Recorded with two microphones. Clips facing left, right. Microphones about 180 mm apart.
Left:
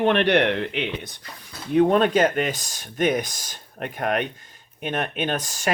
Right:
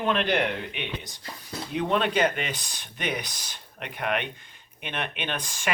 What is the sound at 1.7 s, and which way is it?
Speech, 50° left (ahead or behind).